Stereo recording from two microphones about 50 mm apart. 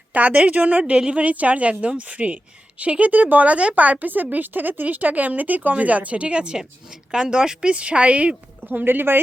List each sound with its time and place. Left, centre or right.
0.1 s a woman's voice: right
4.0 s a woman's voice: right
8.6 s speech: right